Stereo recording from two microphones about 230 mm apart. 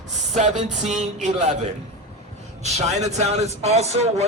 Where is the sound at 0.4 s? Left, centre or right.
Right.